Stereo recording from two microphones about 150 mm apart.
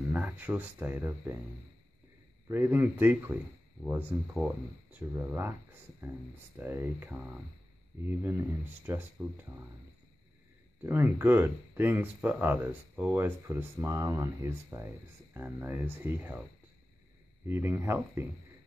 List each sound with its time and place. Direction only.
0.1 s speech: 10° right (ahead or behind)
2.4 s speech: 15° right (ahead or behind)
6.6 s speech: 15° right (ahead or behind)
10.8 s speech: 15° right (ahead or behind)
17.5 s speech: 15° right (ahead or behind)